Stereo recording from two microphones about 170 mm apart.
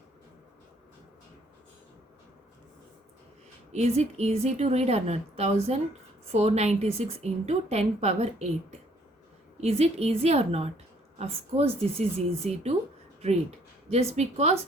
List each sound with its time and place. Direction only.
3.7 s a woman's voice: 40° right (ahead or behind)
9.6 s a woman's voice: 40° right (ahead or behind)
13.9 s a woman's voice: 40° right (ahead or behind)